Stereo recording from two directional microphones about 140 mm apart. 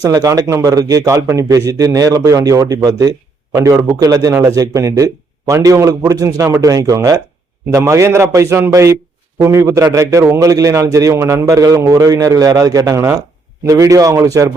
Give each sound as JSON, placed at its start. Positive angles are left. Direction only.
{"t": 0.0, "sound": "speech", "side_deg": -25}